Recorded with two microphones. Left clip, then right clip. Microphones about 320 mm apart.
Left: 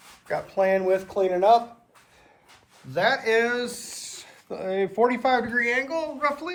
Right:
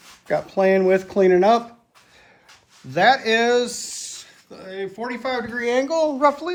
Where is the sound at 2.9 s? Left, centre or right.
Centre.